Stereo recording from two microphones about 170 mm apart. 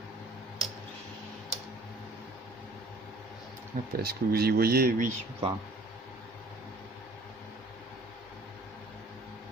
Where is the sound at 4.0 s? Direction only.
65° right (ahead or behind).